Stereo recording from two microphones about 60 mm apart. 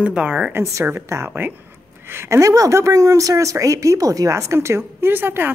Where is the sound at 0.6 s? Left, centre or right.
Right.